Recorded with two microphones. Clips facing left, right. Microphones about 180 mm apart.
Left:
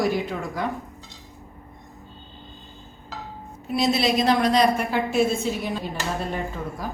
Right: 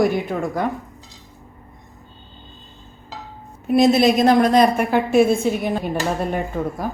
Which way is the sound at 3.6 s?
50° right (ahead or behind).